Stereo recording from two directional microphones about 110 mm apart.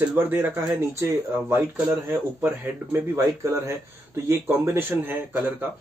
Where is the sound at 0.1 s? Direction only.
20° right (ahead or behind).